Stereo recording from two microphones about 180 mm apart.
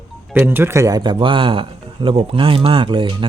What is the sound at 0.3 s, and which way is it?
A man's voice, 10° right (ahead or behind).